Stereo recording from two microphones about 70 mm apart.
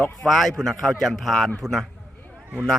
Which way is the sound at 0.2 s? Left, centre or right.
Centre.